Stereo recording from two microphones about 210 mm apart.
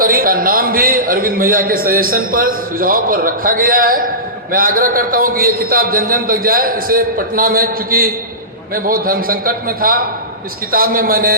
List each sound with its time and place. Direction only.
0.0 s a man's voice: 45° right (ahead or behind)